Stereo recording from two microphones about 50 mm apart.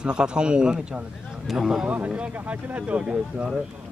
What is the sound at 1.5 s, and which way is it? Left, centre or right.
Speech, centre.